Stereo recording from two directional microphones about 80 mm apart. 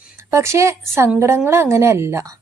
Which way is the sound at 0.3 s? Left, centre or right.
Right.